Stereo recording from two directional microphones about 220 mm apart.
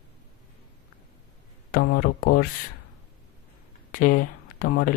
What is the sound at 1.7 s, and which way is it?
Speech, 45° left (ahead or behind).